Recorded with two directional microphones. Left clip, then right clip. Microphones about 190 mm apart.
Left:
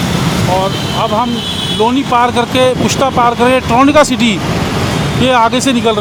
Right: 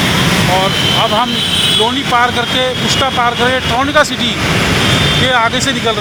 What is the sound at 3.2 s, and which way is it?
Speech, 30° left (ahead or behind).